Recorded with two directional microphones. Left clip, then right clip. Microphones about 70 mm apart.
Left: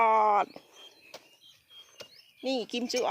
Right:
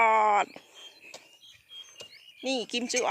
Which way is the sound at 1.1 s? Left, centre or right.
Right.